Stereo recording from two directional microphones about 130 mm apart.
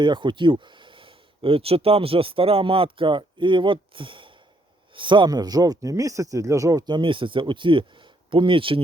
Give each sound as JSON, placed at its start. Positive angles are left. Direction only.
{"t": 0.0, "sound": "speech", "side_deg": -35}